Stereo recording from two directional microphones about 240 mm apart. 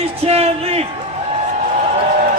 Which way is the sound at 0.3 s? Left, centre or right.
Right.